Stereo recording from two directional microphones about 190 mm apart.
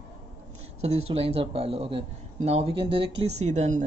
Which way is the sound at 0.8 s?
35° right (ahead or behind).